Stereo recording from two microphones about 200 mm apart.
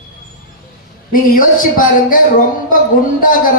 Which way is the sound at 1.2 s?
45° left (ahead or behind).